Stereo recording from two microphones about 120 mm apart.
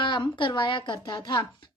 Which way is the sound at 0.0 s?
45° left (ahead or behind).